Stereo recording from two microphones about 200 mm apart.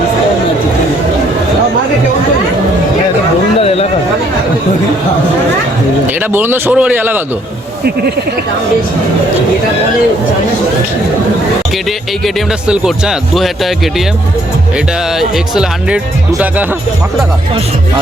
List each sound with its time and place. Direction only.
3.6 s a sound: 30° left (ahead or behind)
6.3 s a man's voice: 10° right (ahead or behind)
11.9 s speech: centre (ahead or behind)
15.2 s speech: 5° right (ahead or behind)